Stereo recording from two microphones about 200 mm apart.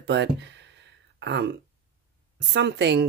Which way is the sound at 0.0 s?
60° right (ahead or behind).